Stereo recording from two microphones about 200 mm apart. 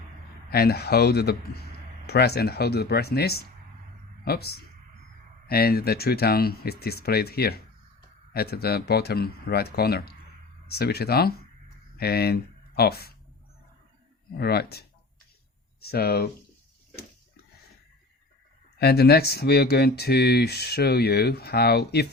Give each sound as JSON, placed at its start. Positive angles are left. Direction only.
{"t": 0.5, "sound": "speech", "side_deg": 50}
{"t": 14.3, "sound": "speech", "side_deg": 50}
{"t": 18.8, "sound": "speech", "side_deg": 55}